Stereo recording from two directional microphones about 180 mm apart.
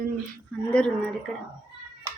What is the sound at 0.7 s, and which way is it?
Speech, 5° left (ahead or behind).